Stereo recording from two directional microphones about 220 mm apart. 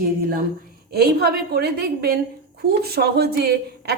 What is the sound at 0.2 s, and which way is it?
A woman's voice, 40° right (ahead or behind).